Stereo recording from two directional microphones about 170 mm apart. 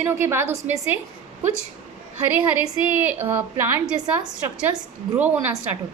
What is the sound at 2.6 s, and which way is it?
A woman's voice, 10° right (ahead or behind).